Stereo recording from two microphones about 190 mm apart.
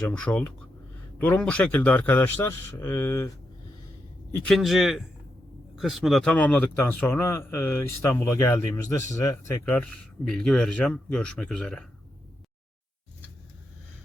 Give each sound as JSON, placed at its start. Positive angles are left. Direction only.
{"t": 0.0, "sound": "speech", "side_deg": 5}
{"t": 4.3, "sound": "speech", "side_deg": 0}